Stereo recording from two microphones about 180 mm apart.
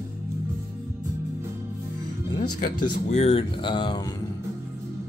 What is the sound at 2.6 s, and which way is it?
Speech, 40° left (ahead or behind).